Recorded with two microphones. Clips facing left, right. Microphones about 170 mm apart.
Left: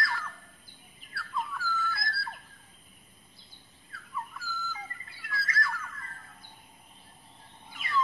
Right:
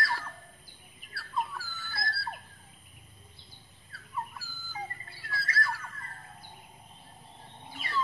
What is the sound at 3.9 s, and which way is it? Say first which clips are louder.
Bird: right 1 dB; 35° right (ahead or behind).